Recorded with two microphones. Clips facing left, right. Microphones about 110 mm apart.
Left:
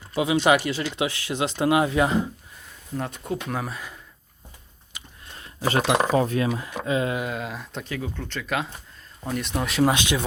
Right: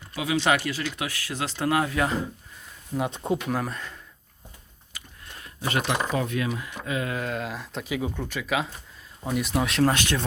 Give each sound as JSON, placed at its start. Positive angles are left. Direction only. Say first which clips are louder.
{"t": 0.1, "sound": "speech", "louder": "left 4 dB", "side_deg": 25}
{"t": 3.5, "sound": "speech", "louder": "right 1 dB", "side_deg": 0}
{"t": 5.5, "sound": "speech", "louder": "left 4 dB", "side_deg": 35}
{"t": 5.8, "sound": "speech", "louder": "left 7 dB", "side_deg": 90}
{"t": 6.1, "sound": "speech", "louder": "left 5 dB", "side_deg": 35}
{"t": 7.2, "sound": "speech", "louder": "left 1 dB", "side_deg": 5}
{"t": 7.9, "sound": "speech", "louder": "right 3 dB", "side_deg": -15}
{"t": 9.8, "sound": "speech", "louder": "left 3 dB", "side_deg": 15}